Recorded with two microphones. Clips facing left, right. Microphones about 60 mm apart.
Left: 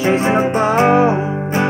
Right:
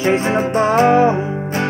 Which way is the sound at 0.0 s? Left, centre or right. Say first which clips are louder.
Left 2 dB; centre.